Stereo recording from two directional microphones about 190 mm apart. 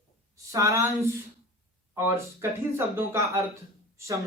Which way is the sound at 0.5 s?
15° right (ahead or behind).